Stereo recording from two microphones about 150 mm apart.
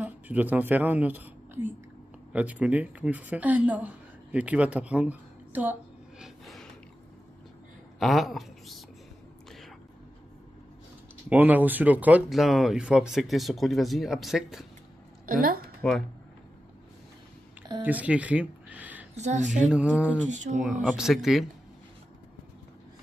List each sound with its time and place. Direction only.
0.0 s a woman's voice: 10° right (ahead or behind)
8.0 s speech: centre (ahead or behind)
11.2 s speech: 10° right (ahead or behind)
15.2 s a woman's voice: 70° right (ahead or behind)
15.8 s speech: 5° left (ahead or behind)
17.8 s a sound: 10° right (ahead or behind)
19.1 s a woman's voice: 50° right (ahead or behind)
19.5 s speech: 5° right (ahead or behind)
20.2 s a woman's voice: 55° right (ahead or behind)
20.6 s speech: 5° right (ahead or behind)